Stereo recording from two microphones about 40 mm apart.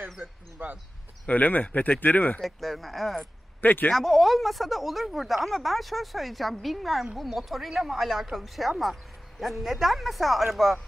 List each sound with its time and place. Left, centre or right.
0.0 s speech: centre
0.6 s speech: right
1.2 s speech: left
2.4 s speech: centre
3.6 s speech: left
3.9 s speech: centre